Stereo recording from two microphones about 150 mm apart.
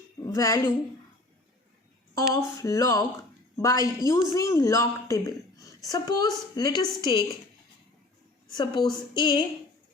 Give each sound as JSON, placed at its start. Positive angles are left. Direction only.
{"t": 0.3, "sound": "a woman's voice", "side_deg": 20}
{"t": 2.3, "sound": "a woman's voice", "side_deg": 20}
{"t": 8.5, "sound": "a woman's voice", "side_deg": 30}